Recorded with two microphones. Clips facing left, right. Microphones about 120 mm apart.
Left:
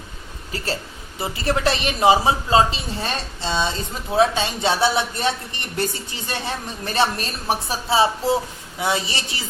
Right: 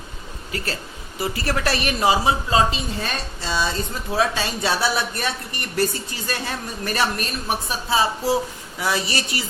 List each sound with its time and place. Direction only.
0.5 s a woman's voice: 30° left (ahead or behind)